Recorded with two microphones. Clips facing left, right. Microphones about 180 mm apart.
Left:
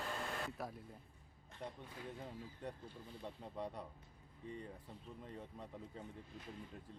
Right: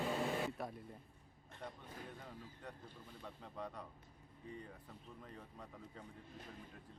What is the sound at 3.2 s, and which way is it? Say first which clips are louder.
Speech: left 3 dB; 30° left (ahead or behind).